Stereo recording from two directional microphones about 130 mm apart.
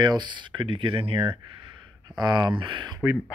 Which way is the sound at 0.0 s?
35° right (ahead or behind).